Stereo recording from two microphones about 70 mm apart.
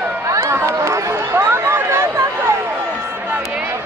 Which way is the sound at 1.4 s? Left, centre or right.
Right.